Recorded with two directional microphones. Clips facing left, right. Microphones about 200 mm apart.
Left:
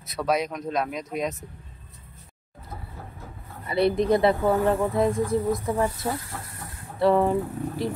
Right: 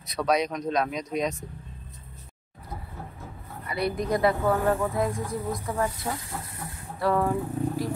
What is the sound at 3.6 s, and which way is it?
A woman's voice, 25° left (ahead or behind).